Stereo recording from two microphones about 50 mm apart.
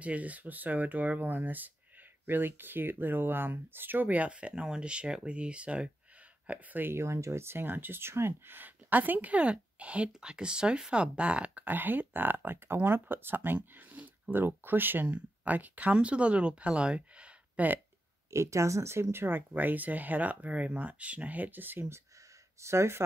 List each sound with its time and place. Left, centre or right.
0.0 s speech: right
6.8 s speech: right
7.4 s speech: right
11.6 s speech: right
14.3 s speech: right
15.1 s speech: right
18.3 s speech: right
19.2 s speech: right
22.6 s speech: right